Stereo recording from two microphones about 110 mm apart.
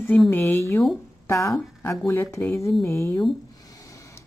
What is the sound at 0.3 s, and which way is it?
Speech, 20° left (ahead or behind).